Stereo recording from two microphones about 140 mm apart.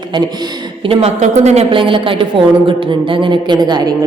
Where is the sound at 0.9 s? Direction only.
50° right (ahead or behind).